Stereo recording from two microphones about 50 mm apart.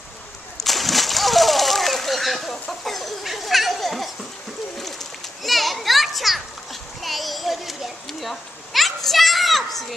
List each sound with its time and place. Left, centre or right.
0.7 s splash: centre
2.8 s a sound: centre
4.7 s children playing: centre